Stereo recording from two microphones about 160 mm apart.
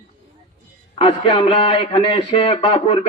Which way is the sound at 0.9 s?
35° left (ahead or behind).